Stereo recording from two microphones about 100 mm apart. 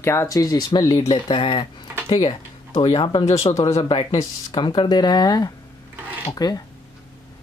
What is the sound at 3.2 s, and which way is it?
Speech, 90° left.